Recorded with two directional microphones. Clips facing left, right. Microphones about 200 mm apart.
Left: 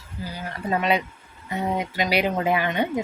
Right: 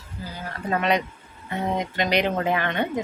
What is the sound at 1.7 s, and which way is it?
A woman's voice, 5° left (ahead or behind).